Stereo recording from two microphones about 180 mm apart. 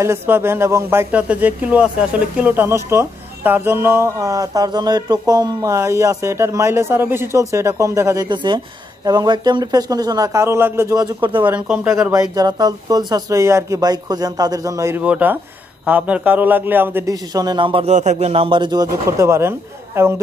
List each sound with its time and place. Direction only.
0.0 s a man's voice: 15° right (ahead or behind)
11.4 s speech: 5° right (ahead or behind)
11.9 s a man's voice: 20° right (ahead or behind)